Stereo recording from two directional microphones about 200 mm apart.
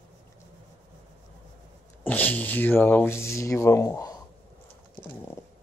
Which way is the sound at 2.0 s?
10° left (ahead or behind).